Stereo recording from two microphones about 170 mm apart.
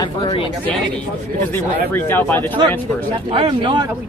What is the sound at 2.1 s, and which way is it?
Speech, 10° left (ahead or behind).